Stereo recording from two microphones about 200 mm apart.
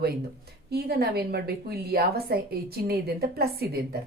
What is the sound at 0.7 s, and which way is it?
A woman's voice, 55° right (ahead or behind).